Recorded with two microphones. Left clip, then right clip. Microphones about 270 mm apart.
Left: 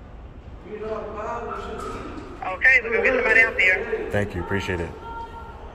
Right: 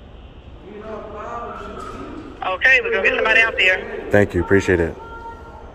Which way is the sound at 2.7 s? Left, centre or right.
Right.